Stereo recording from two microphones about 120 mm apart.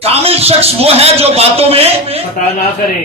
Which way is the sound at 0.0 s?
55° right (ahead or behind).